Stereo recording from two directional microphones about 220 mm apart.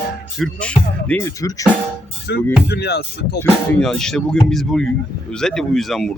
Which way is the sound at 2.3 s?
50° left (ahead or behind).